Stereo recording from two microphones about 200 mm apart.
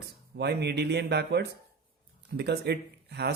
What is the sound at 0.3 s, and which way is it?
Speech, 55° right (ahead or behind).